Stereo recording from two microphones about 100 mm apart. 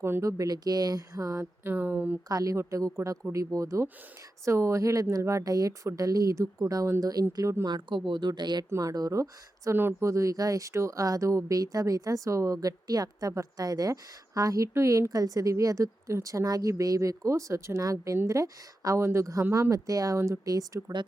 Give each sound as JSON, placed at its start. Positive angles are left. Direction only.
{"t": 0.0, "sound": "speech", "side_deg": -30}
{"t": 1.7, "sound": "speech", "side_deg": -20}
{"t": 2.3, "sound": "speech", "side_deg": -35}
{"t": 8.7, "sound": "speech", "side_deg": -35}